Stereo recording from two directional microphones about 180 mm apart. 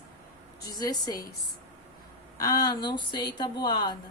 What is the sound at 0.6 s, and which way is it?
Speech, 20° left (ahead or behind).